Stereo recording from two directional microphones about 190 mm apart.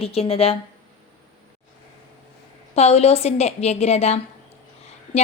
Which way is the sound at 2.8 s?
35° left (ahead or behind).